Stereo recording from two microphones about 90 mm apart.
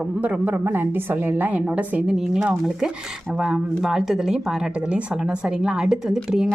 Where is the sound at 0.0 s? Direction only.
15° right (ahead or behind).